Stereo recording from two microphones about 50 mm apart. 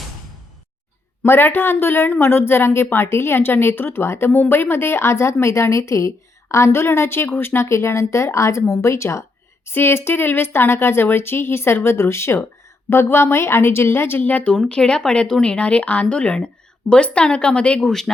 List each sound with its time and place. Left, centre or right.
1.2 s a woman's voice: left
4.3 s a woman's voice: left
6.7 s a woman's voice: left
9.6 s a woman's voice: left
14.2 s speech: left
14.7 s speech: centre